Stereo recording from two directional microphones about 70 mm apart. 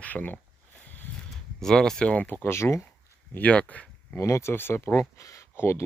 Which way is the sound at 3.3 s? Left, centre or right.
Centre.